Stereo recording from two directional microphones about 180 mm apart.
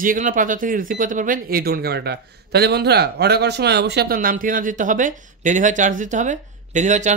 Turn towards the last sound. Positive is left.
turn(degrees=-40)  # may be behind; listen again after turning